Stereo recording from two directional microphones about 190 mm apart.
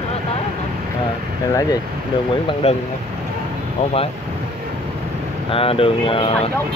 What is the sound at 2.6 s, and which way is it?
Speech, 35° left (ahead or behind).